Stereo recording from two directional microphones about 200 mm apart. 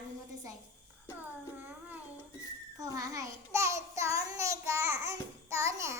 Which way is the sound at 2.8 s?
15° right (ahead or behind).